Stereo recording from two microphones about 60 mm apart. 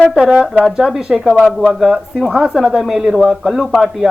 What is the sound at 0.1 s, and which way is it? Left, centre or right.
A woman's voice, centre.